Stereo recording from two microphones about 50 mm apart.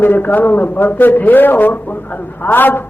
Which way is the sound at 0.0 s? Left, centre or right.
Left.